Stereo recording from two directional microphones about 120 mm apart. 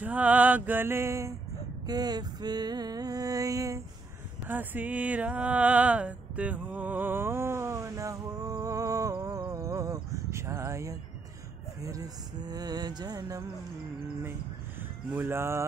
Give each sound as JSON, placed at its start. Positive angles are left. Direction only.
{"t": 0.0, "sound": "mantra", "side_deg": -10}
{"t": 1.9, "sound": "music", "side_deg": -35}
{"t": 4.5, "sound": "a sound", "side_deg": -15}
{"t": 9.5, "sound": "music", "side_deg": -25}
{"t": 10.1, "sound": "a sound", "side_deg": -25}
{"t": 11.8, "sound": "music", "side_deg": -30}
{"t": 15.1, "sound": "music", "side_deg": -20}